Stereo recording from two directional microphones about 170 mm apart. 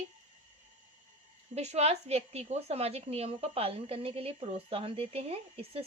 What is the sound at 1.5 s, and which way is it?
A woman's voice, 40° right (ahead or behind).